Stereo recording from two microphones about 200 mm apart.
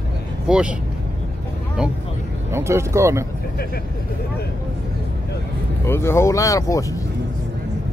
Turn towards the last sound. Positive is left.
turn(degrees=15)  # may be behind; listen again after turning